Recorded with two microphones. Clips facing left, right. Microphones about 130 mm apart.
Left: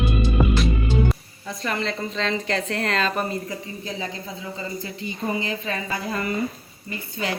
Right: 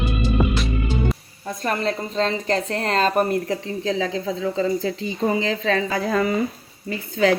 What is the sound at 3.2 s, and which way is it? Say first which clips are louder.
Speech: right 7 dB; 60° right (ahead or behind).